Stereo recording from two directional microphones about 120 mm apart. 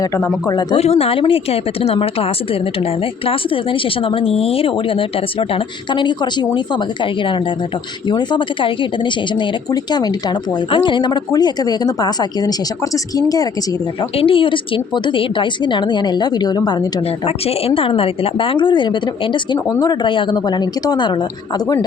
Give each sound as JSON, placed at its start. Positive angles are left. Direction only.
{"t": 0.0, "sound": "a man's voice", "side_deg": 30}
{"t": 0.8, "sound": "a woman's voice", "side_deg": 55}
{"t": 14.2, "sound": "a woman's voice", "side_deg": 50}
{"t": 17.1, "sound": "a woman's voice", "side_deg": 55}